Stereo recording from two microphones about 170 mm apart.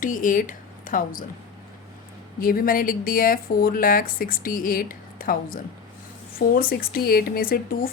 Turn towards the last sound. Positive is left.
turn(degrees=60)  # may be behind; listen again after turning